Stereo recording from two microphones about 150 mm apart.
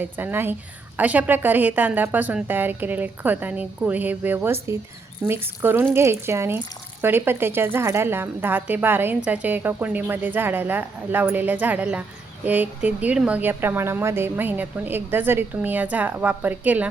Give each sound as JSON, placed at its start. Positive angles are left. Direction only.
{"t": 0.0, "sound": "speech", "side_deg": -15}